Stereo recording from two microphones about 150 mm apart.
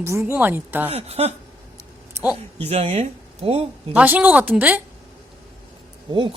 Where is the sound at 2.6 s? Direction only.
45° right (ahead or behind).